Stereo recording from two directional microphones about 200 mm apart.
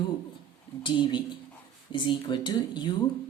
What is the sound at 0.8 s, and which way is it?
A woman's voice, 25° left (ahead or behind).